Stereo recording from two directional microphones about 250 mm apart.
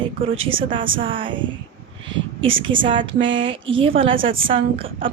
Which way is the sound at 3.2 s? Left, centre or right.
Right.